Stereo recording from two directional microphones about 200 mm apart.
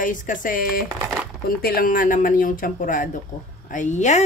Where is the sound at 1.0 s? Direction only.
5° right (ahead or behind).